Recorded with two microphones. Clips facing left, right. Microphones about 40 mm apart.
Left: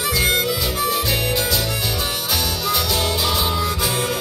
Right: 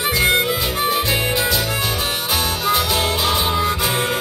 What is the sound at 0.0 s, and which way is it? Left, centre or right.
Harmonica, right.